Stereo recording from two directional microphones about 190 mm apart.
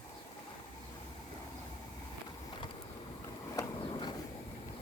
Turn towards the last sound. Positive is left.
turn(degrees=25)  # may be behind; listen again after turning